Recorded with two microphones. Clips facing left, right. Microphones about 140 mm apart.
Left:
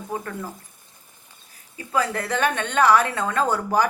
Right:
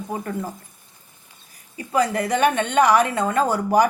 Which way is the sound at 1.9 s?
15° right (ahead or behind).